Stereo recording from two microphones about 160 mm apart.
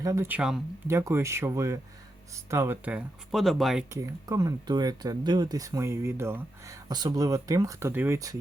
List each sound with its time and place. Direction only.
0.0 s speech: 20° right (ahead or behind)
0.9 s speech: 15° right (ahead or behind); by 3.8 s centre (ahead or behind)
3.9 s speech: 20° right (ahead or behind)